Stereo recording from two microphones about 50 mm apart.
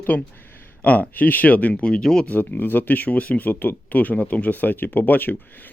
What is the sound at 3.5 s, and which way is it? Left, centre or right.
Speech, left.